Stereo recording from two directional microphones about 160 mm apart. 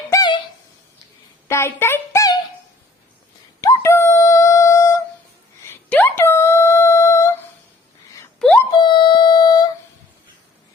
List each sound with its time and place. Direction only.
0.1 s wail: 25° left (ahead or behind)
1.5 s speech: 15° left (ahead or behind)
3.6 s a sound: 20° left (ahead or behind)
5.6 s humming: 15° left (ahead or behind)
8.8 s music: 30° left (ahead or behind)